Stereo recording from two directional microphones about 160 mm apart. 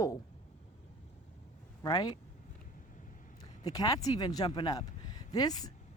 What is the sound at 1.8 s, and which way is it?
Speech, 25° left (ahead or behind).